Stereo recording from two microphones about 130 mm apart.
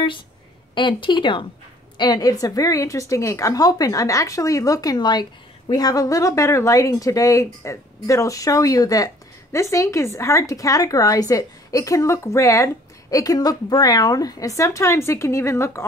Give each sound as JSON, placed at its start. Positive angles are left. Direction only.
{"t": 0.7, "sound": "speech", "side_deg": 35}